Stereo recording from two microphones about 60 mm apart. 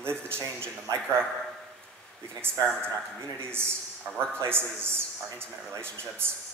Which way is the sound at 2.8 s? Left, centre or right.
Right.